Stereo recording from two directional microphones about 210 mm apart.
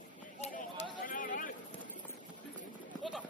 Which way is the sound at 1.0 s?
40° left (ahead or behind).